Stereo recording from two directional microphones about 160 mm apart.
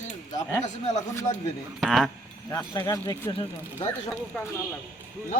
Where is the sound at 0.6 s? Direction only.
45° left (ahead or behind).